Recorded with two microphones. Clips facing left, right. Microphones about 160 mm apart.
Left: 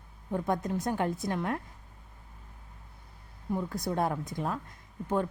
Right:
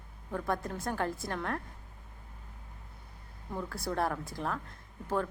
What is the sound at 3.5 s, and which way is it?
A woman's voice, 20° left (ahead or behind).